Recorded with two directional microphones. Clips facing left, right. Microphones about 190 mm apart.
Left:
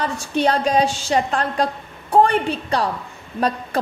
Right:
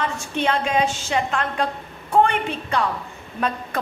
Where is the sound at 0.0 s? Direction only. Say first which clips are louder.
Left 4 dB; 40° left (ahead or behind).